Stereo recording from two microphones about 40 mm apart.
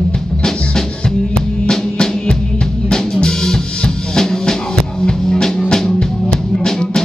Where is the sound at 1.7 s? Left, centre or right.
Centre.